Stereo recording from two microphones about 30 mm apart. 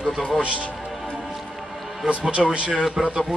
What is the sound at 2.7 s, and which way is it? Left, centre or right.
Speech, centre.